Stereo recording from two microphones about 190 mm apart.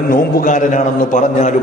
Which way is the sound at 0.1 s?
45° left (ahead or behind).